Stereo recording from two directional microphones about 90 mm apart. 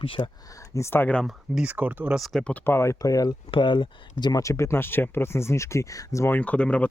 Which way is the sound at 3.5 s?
60° left (ahead or behind).